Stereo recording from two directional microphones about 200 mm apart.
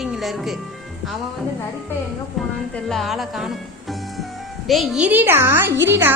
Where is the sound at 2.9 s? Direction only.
Centre (ahead or behind).